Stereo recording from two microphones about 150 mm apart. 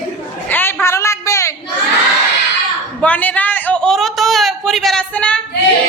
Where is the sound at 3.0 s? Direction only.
10° left (ahead or behind).